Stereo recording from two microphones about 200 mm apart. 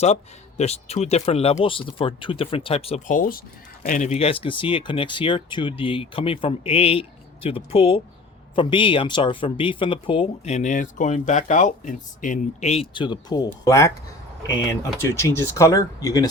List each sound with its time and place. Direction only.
0.0 s speech: 35° left (ahead or behind); by 13.9 s 15° left (ahead or behind)
15.1 s speech: 15° left (ahead or behind)